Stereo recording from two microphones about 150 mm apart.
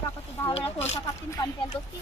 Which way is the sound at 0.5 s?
40° left (ahead or behind).